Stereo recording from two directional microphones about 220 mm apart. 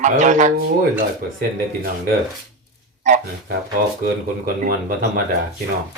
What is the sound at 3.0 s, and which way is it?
Speech, 35° right (ahead or behind).